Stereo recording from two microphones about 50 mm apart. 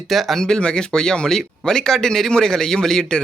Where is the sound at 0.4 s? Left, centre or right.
Centre.